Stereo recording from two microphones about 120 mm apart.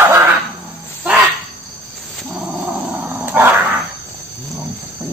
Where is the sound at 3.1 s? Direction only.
15° right (ahead or behind).